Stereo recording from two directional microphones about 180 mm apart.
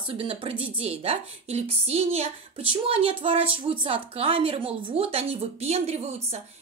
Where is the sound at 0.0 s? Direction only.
30° right (ahead or behind).